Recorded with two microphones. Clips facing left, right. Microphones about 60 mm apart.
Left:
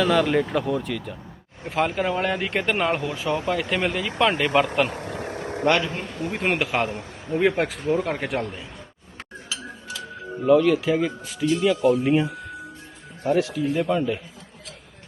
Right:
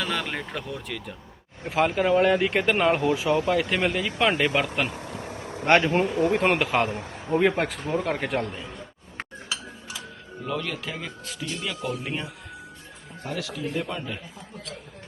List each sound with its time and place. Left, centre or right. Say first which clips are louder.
0.0 s speech: left 9 dB; centre
4.9 s a sound: left 5 dB; left
5.6 s speech: right 3 dB; right
6.3 s speech: right 2 dB; centre
10.4 s speech: left 13 dB; centre
13.2 s speech: left 11 dB; left
13.5 s speech: left 7 dB; centre